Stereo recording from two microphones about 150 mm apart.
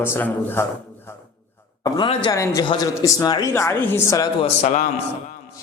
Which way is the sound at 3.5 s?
15° left (ahead or behind).